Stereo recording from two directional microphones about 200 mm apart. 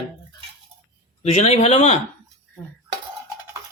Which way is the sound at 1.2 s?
35° left (ahead or behind).